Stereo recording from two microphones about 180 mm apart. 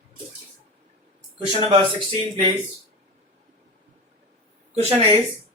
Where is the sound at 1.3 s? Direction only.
25° right (ahead or behind).